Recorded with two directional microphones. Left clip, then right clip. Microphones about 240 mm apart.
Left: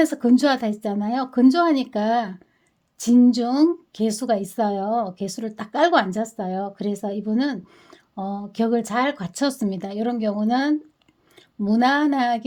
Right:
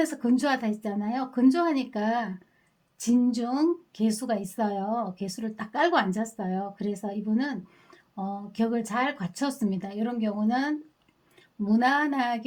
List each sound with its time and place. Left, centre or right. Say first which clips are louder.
0.0 s a woman's voice: left 7 dB; left